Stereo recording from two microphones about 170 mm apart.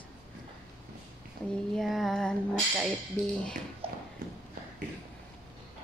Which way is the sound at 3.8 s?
35° right (ahead or behind).